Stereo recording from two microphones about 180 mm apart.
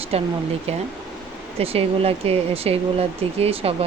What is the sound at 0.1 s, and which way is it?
Speech, 35° right (ahead or behind).